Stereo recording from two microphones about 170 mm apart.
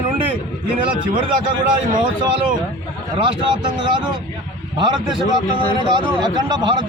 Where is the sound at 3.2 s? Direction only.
25° right (ahead or behind).